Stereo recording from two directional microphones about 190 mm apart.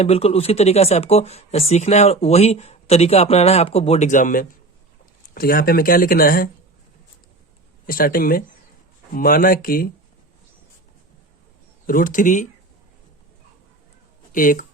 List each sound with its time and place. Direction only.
0.0 s speech: 30° left (ahead or behind); by 6.5 s 50° left (ahead or behind)
7.9 s speech: 50° left (ahead or behind)
11.9 s speech: 45° left (ahead or behind)
14.3 s speech: 45° left (ahead or behind)